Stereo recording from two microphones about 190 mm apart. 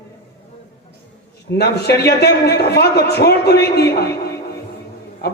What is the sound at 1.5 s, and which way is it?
A man's voice, 60° left (ahead or behind).